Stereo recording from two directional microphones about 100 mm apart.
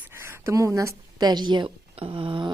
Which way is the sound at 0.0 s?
25° right (ahead or behind).